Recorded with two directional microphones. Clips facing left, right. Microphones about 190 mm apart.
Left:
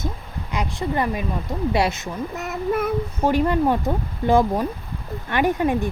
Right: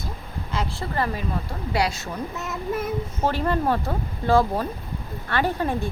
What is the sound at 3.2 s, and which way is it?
Speech, 15° left (ahead or behind).